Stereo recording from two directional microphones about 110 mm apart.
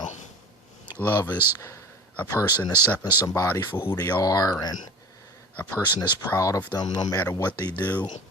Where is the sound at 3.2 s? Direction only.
30° left (ahead or behind).